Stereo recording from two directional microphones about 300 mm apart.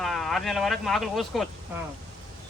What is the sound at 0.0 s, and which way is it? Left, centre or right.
Speech, centre.